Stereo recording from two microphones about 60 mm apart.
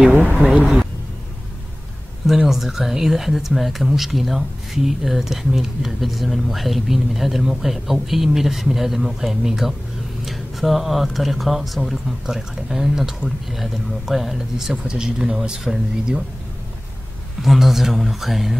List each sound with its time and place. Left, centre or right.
0.4 s speech: right
2.2 s speech: centre
17.4 s speech: centre